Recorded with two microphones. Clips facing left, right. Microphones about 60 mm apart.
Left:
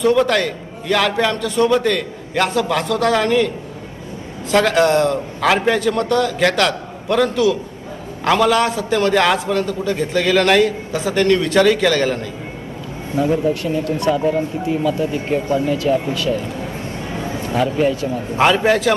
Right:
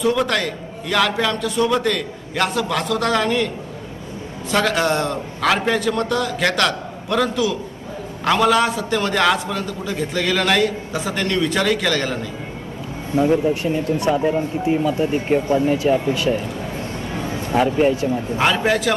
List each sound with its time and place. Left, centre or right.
0.2 s a man's voice: centre
4.5 s a man's voice: centre
13.1 s speech: right
17.5 s speech: right
18.6 s a man's voice: centre